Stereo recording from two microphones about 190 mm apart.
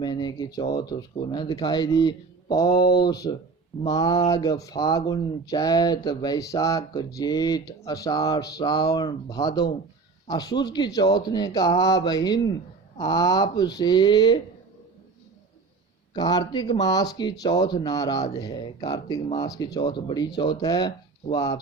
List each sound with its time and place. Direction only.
0.0 s speech: 20° left (ahead or behind)
16.1 s speech: 20° left (ahead or behind)